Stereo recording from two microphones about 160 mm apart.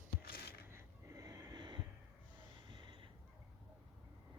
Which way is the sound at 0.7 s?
15° right (ahead or behind).